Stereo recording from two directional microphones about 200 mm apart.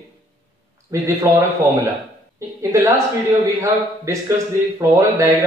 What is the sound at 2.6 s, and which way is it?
Speech, 15° right (ahead or behind).